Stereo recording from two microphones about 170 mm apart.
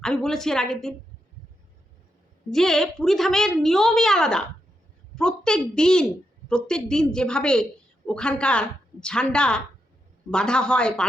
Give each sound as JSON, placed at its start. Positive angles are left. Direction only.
{"t": 0.0, "sound": "a woman's voice", "side_deg": 5}
{"t": 2.5, "sound": "a woman's voice", "side_deg": 5}